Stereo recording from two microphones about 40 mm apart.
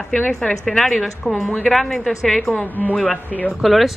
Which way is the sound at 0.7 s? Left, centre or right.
Centre.